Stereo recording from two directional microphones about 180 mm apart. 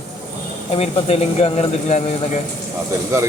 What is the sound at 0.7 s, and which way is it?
Speech, 35° left (ahead or behind).